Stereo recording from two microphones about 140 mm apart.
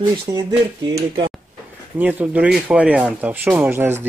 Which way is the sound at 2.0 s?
10° right (ahead or behind).